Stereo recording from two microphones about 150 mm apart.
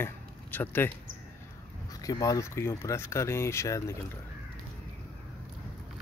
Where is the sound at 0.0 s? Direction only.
15° left (ahead or behind).